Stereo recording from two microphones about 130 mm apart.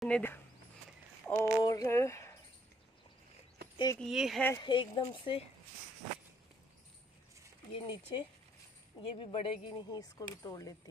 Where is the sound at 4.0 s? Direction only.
Centre (ahead or behind).